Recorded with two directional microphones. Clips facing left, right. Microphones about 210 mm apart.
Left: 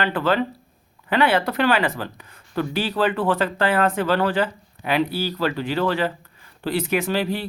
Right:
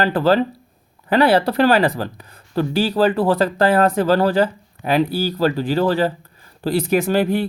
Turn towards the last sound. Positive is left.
turn(degrees=-50)  # may be behind; listen again after turning